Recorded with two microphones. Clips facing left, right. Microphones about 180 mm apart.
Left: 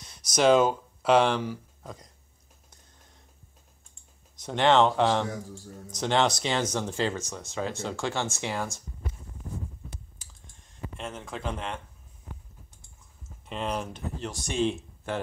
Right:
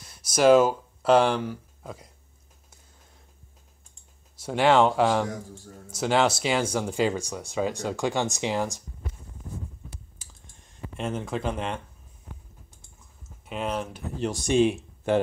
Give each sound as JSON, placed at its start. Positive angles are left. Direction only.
{"t": 0.0, "sound": "speech", "side_deg": -5}
{"t": 4.4, "sound": "speech", "side_deg": -10}
{"t": 11.0, "sound": "speech", "side_deg": -10}
{"t": 13.5, "sound": "speech", "side_deg": -5}